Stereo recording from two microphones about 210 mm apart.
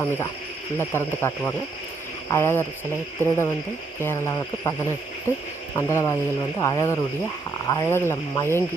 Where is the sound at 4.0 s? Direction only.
15° left (ahead or behind).